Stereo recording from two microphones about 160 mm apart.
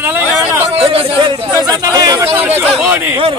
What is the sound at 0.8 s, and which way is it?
Speech, 35° right (ahead or behind).